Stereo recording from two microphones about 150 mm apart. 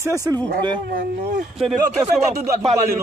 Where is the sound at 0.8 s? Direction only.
80° right.